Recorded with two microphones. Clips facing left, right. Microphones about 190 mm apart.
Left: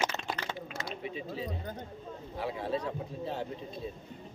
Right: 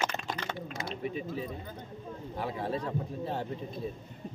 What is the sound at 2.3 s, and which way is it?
Speech, 50° right (ahead or behind).